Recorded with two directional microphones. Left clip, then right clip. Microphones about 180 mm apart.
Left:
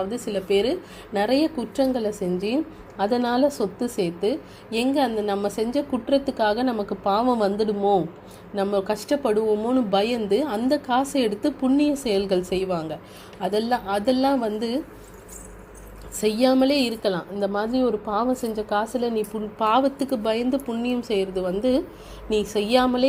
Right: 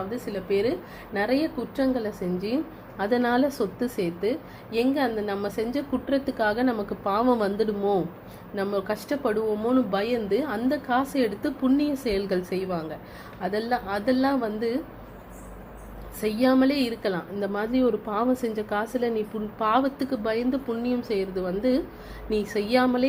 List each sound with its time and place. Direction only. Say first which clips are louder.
0.3 s a woman's voice: left 3 dB; 40° left (ahead or behind)
3.0 s a woman's voice: left 2 dB; 25° left (ahead or behind)
16.2 s a woman's voice: left 3 dB; 35° left (ahead or behind)